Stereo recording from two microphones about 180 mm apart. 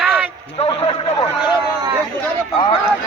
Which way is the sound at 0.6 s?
35° left (ahead or behind).